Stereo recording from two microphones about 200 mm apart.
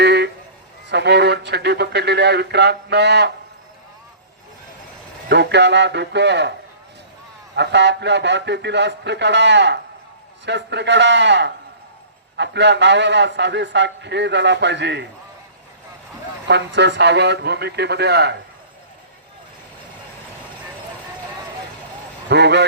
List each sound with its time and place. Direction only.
0.0 s a sound: 60° right (ahead or behind)
0.9 s a man's voice: 60° right (ahead or behind)
5.3 s a man's voice: 60° right (ahead or behind)
7.5 s a man's voice: 60° right (ahead or behind)
16.5 s a man's voice: 60° right (ahead or behind)
22.3 s a man's voice: 60° right (ahead or behind)